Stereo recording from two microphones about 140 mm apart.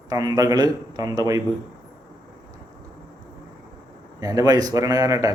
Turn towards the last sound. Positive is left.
turn(degrees=-25)  # may be behind; listen again after turning